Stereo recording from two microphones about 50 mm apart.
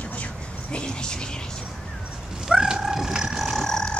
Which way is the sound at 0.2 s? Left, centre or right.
Left.